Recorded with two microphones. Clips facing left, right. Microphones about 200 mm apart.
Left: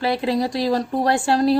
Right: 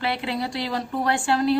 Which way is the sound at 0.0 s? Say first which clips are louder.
Left 6 dB; 40° left (ahead or behind).